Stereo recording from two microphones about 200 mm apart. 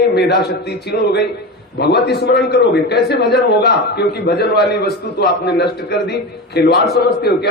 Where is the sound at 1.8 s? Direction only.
55° left (ahead or behind).